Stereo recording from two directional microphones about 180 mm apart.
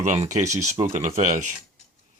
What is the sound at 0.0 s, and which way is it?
Speech, 45° right (ahead or behind).